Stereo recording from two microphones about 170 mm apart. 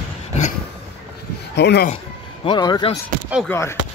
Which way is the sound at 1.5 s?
75° left (ahead or behind).